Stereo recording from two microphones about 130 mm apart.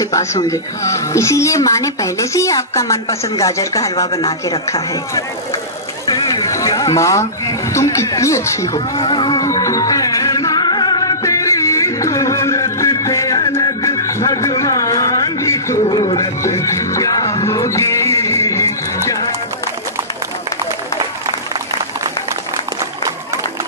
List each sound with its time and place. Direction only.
0.0 s speech: 25° left (ahead or behind)
6.0 s a sound: 30° left (ahead or behind)
15.8 s music: 45° left (ahead or behind)
16.2 s music: 25° left (ahead or behind)